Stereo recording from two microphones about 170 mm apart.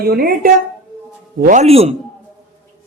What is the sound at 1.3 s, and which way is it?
Speech, 50° right (ahead or behind).